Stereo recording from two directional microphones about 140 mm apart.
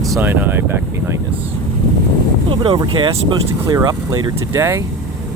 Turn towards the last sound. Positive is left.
turn(degrees=-20)  # may be behind; listen again after turning